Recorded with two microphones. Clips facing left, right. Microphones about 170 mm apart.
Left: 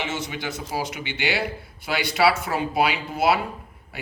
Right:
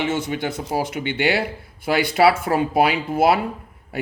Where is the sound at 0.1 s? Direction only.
55° right (ahead or behind).